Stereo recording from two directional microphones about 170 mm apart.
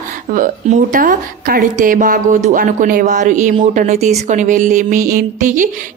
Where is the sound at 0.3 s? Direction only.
50° right (ahead or behind).